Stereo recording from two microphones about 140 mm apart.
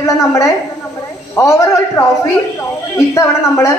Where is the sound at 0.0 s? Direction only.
20° left (ahead or behind).